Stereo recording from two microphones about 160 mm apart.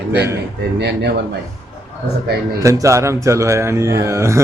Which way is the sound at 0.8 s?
90° right.